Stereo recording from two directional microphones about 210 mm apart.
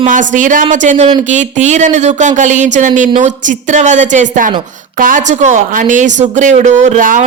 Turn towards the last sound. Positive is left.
turn(degrees=-40)  # may be behind; listen again after turning